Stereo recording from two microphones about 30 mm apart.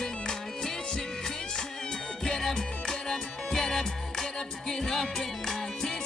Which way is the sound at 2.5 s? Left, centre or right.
Left.